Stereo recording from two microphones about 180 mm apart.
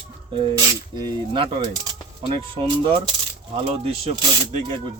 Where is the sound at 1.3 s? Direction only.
30° right (ahead or behind).